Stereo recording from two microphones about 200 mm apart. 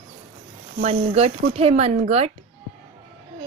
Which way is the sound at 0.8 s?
30° right (ahead or behind).